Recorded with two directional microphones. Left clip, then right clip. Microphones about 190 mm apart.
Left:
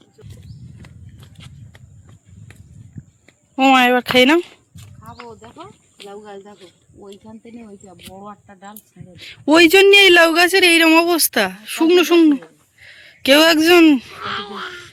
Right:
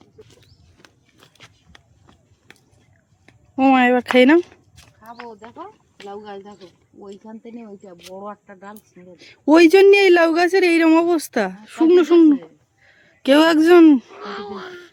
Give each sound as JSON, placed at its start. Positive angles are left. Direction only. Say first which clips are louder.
{"t": 3.5, "sound": "a man's voice", "louder": "left 2 dB", "side_deg": -10}
{"t": 5.0, "sound": "wild animals", "louder": "even", "side_deg": -10}
{"t": 6.0, "sound": "speech", "louder": "right 1 dB", "side_deg": 0}
{"t": 8.2, "sound": "speech", "louder": "right 3 dB", "side_deg": 25}
{"t": 9.1, "sound": "a man's voice", "louder": "left 1 dB", "side_deg": -10}
{"t": 14.2, "sound": "speech", "louder": "left 5 dB", "side_deg": -30}